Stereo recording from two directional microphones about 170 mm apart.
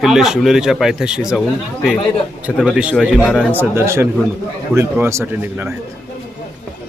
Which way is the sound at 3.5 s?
15° right (ahead or behind).